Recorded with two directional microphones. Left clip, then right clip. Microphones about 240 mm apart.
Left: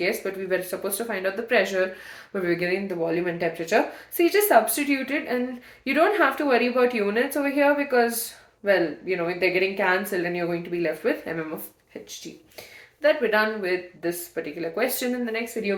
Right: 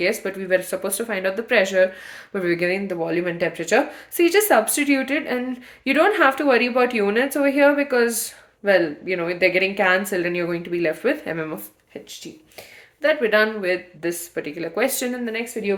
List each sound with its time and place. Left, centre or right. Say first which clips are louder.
0.0 s speech: right 3 dB; right
13.0 s speech: right 3 dB; right